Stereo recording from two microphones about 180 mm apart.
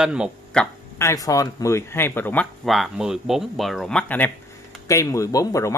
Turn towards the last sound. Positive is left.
turn(degrees=15)  # may be behind; listen again after turning